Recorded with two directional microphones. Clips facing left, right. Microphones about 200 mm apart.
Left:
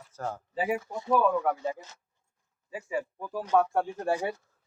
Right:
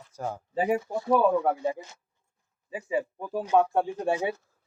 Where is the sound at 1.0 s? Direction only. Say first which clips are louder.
Right 2 dB; 30° right (ahead or behind).